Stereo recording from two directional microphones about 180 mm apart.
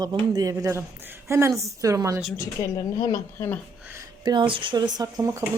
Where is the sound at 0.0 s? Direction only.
20° right (ahead or behind).